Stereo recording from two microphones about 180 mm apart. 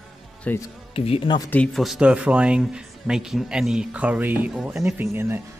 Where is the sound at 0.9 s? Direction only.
30° left (ahead or behind).